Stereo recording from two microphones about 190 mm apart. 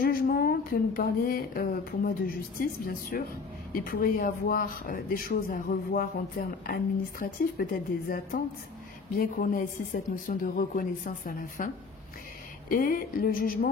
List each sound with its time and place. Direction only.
0.0 s a woman's voice: 50° left (ahead or behind)